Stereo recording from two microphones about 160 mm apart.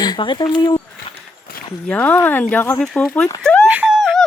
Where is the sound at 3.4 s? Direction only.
5° left (ahead or behind).